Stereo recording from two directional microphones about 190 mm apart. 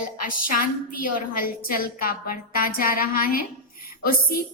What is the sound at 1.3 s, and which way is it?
A woman's voice, 50° left (ahead or behind).